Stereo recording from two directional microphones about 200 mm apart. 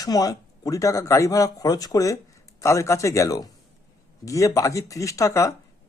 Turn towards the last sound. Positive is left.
turn(degrees=15)  # may be behind; listen again after turning